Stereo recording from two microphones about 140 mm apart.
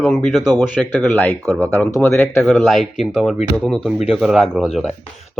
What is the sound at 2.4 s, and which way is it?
Speech, centre (ahead or behind).